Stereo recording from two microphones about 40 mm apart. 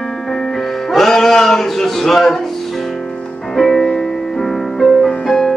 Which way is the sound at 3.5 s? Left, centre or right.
Centre.